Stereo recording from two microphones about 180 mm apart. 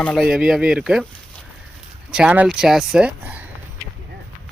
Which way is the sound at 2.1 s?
5° right (ahead or behind).